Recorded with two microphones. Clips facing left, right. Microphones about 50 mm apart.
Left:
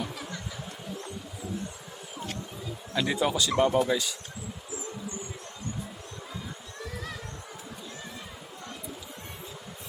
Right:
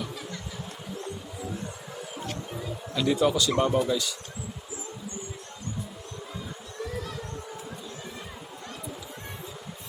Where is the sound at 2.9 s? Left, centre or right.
Centre.